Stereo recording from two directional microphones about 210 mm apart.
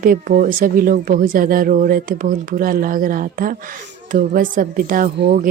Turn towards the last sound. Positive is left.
turn(degrees=-40)  # may be behind; listen again after turning